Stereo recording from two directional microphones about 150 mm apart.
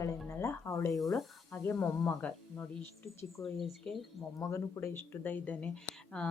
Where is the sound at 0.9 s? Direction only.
Centre (ahead or behind).